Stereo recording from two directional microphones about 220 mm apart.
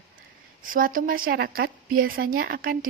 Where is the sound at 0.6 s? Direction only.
40° right (ahead or behind).